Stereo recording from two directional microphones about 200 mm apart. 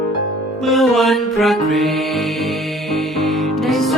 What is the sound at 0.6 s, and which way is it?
Music, centre (ahead or behind).